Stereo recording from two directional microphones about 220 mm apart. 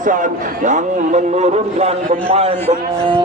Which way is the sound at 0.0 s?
35° right (ahead or behind).